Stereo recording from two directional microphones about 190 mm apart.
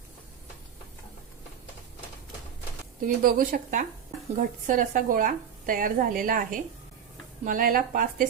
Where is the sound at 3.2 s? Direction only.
45° right (ahead or behind).